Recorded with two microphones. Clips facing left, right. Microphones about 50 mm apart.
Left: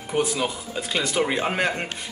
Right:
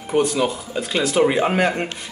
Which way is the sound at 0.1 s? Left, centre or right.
Centre.